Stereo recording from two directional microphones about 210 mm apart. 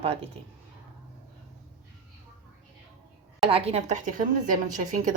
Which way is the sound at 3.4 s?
25° right (ahead or behind).